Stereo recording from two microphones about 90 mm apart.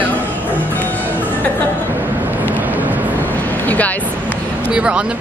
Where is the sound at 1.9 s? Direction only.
20° right (ahead or behind).